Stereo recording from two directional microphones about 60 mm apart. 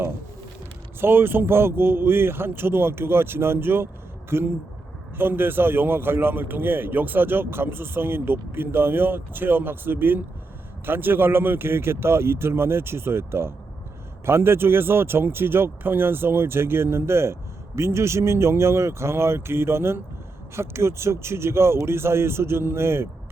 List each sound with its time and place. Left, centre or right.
0.9 s a man's voice: right